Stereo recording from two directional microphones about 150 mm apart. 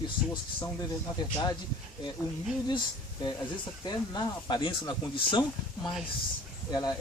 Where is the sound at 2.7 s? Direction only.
30° left (ahead or behind).